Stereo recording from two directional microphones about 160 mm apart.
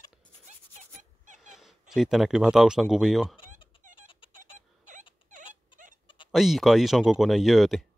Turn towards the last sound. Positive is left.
turn(degrees=0)  # may be behind; listen again after turning